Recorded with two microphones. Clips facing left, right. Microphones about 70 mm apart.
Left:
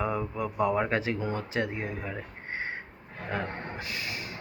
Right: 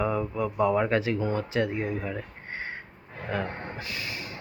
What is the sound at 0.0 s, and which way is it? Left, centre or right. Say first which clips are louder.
Speech: right 3 dB; centre.